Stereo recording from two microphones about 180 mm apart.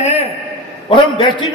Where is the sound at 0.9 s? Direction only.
25° left (ahead or behind).